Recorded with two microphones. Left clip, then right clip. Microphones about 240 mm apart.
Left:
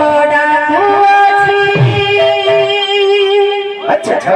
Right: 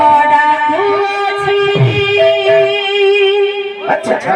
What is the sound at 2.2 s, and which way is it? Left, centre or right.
Music, left.